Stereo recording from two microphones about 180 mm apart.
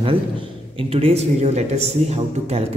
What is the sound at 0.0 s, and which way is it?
A man's voice, 30° right (ahead or behind).